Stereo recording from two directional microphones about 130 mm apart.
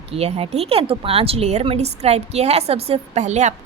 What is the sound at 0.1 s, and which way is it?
A woman's voice, 50° right (ahead or behind).